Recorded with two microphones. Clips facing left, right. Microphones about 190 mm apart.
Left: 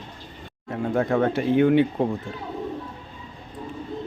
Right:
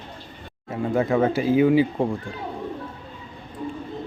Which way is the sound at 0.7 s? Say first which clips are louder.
Right 1 dB; centre (ahead or behind).